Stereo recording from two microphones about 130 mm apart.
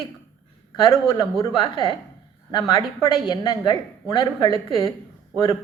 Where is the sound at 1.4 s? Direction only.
40° left (ahead or behind).